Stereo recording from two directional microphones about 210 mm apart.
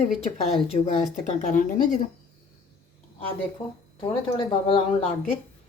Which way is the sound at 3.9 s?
25° left (ahead or behind).